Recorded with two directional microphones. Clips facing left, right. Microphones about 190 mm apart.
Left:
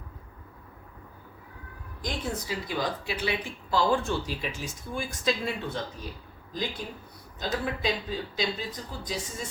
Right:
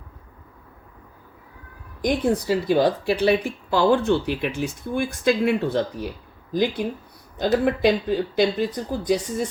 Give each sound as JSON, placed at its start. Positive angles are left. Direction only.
{"t": 2.0, "sound": "speech", "side_deg": -65}